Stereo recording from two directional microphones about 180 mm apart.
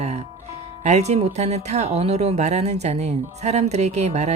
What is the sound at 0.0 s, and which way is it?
Speech, 40° right (ahead or behind).